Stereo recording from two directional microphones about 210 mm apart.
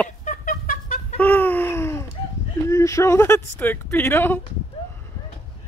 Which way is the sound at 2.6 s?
15° left (ahead or behind).